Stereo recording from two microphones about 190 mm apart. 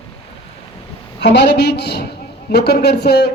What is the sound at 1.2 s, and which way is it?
Speech, 65° left (ahead or behind).